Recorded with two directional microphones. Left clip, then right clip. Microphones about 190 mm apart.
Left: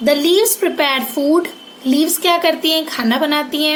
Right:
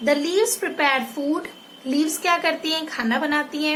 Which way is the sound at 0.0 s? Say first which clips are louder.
Left 7 dB; 35° left (ahead or behind).